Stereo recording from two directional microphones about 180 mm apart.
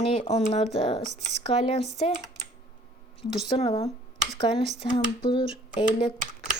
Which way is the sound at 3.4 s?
25° left (ahead or behind).